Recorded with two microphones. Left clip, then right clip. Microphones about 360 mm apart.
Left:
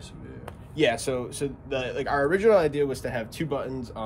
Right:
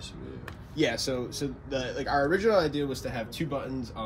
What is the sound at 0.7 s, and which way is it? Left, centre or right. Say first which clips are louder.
Speech: left 4 dB; left.